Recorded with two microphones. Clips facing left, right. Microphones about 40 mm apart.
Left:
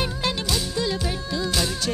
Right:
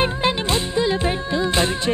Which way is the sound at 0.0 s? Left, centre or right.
Right.